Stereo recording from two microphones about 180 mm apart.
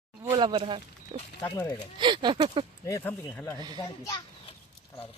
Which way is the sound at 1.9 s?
25° right (ahead or behind).